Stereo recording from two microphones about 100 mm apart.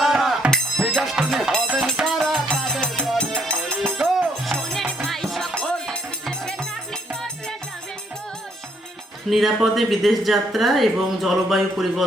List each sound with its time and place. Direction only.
0.0 s music: centre (ahead or behind)
9.3 s speech: centre (ahead or behind)